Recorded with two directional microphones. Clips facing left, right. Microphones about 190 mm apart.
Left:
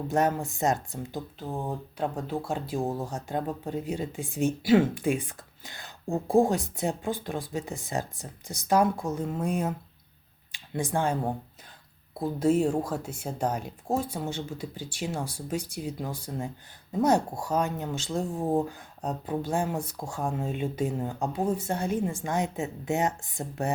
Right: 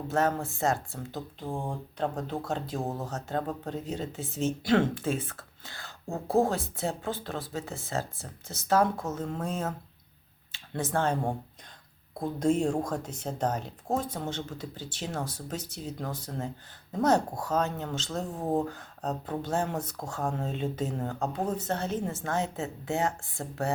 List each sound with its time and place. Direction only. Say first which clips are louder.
0.1 s speech: left 1 dB; 15° left (ahead or behind)
1.4 s speech: left 1 dB; 5° left (ahead or behind)
12.2 s speech: left 2 dB; 5° left (ahead or behind)